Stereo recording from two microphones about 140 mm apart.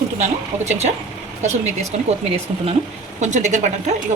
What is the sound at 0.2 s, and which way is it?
Speech, 55° right (ahead or behind).